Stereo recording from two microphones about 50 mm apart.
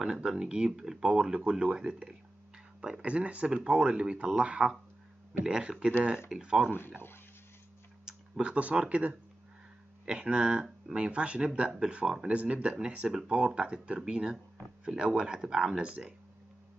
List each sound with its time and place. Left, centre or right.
0.0 s speech: centre
1.1 s speech: right
8.0 s speech: centre
12.3 s speech: right